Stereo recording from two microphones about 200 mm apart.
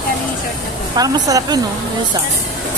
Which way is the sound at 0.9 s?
20° right (ahead or behind).